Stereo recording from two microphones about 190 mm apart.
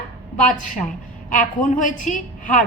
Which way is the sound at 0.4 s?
45° left (ahead or behind).